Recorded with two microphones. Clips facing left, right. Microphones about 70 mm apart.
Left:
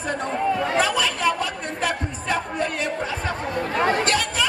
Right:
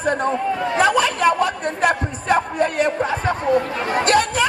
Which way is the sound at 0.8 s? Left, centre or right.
Right.